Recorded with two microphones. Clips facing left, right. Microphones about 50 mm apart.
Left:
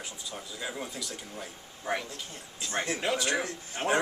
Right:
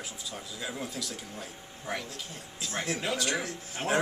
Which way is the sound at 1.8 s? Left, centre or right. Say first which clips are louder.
Left 4 dB; centre.